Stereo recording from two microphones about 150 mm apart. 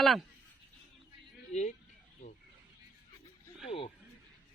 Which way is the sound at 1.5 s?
50° left (ahead or behind).